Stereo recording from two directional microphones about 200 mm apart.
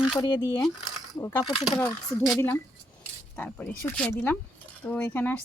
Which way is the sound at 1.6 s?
5° left (ahead or behind).